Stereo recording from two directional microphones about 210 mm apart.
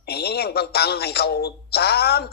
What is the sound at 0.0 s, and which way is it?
Speech, 50° left (ahead or behind).